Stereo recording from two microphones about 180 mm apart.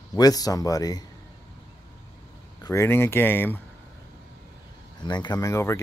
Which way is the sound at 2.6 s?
15° left (ahead or behind).